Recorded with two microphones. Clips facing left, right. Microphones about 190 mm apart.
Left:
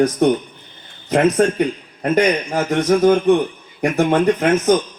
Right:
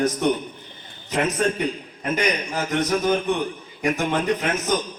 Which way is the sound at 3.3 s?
60° left (ahead or behind).